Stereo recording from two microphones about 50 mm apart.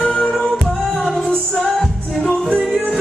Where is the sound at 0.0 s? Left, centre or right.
Left.